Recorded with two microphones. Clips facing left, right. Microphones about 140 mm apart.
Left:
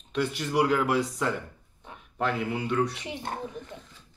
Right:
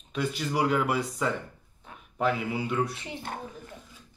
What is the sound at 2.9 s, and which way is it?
Speech, 20° left (ahead or behind).